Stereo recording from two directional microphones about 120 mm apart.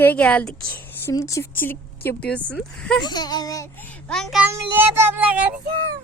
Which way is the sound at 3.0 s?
35° left (ahead or behind).